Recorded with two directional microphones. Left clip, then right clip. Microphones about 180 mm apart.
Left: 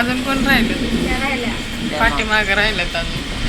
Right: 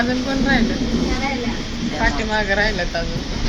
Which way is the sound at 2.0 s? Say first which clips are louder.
Left 4 dB; 25° right (ahead or behind).